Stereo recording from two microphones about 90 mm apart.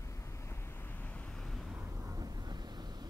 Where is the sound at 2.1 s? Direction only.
45° right (ahead or behind).